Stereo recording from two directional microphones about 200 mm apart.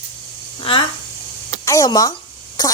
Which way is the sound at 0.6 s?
25° left (ahead or behind).